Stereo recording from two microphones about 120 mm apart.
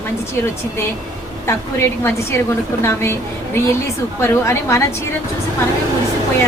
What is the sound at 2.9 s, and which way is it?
Speech, 20° left (ahead or behind).